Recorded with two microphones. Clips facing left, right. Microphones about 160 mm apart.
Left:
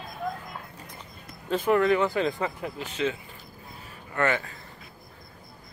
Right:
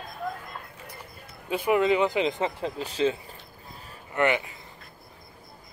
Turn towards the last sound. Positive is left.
turn(degrees=-20)  # may be behind; listen again after turning